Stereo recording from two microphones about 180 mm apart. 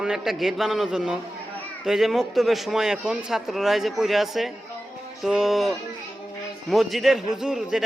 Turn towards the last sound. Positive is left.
turn(degrees=0)  # may be behind; listen again after turning